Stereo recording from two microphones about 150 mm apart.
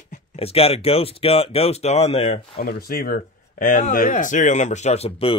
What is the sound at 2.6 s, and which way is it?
Speech, 90° left.